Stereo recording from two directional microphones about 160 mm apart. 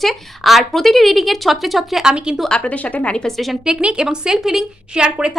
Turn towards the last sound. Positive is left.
turn(degrees=-5)  # may be behind; listen again after turning